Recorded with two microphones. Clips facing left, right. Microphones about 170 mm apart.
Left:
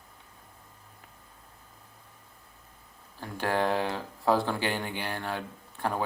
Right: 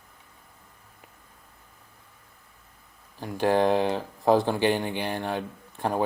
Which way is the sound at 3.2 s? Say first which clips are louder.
Right 6 dB; 20° right (ahead or behind).